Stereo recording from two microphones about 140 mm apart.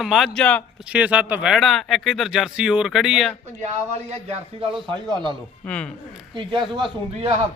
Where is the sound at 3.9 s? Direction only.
45° right (ahead or behind).